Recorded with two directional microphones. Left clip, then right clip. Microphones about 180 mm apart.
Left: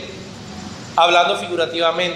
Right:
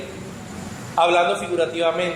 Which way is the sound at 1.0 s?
10° left (ahead or behind).